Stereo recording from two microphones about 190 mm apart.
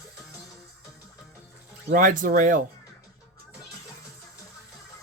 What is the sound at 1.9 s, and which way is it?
Speech, 45° right (ahead or behind).